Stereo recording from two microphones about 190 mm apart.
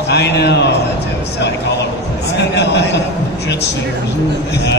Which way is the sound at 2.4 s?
65° left (ahead or behind).